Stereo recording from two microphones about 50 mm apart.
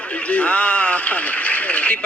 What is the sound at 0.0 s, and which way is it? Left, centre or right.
A man's voice, left.